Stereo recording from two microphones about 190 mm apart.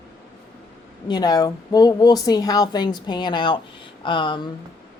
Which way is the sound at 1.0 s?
20° left (ahead or behind).